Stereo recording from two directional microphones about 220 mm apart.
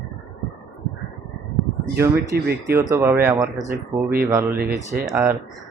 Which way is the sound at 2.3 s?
45° right (ahead or behind).